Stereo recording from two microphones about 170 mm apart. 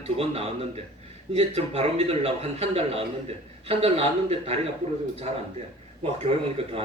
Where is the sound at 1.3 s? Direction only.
35° right (ahead or behind).